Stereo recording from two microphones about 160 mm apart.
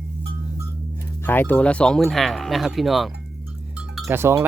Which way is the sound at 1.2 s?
10° left (ahead or behind).